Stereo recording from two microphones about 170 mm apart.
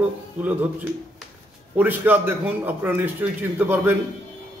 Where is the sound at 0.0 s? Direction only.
10° right (ahead or behind).